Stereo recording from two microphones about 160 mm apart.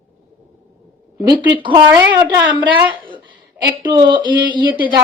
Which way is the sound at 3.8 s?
30° right (ahead or behind).